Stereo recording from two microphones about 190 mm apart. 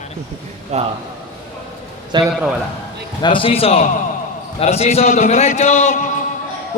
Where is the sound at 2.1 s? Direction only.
25° right (ahead or behind).